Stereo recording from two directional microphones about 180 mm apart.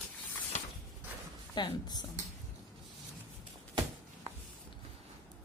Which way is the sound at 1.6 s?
25° left (ahead or behind).